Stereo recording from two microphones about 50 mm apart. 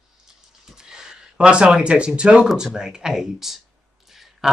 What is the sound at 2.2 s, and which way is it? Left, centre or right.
Speech, right.